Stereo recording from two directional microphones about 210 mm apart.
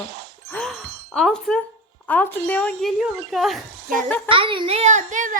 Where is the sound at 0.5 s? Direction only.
5° left (ahead or behind).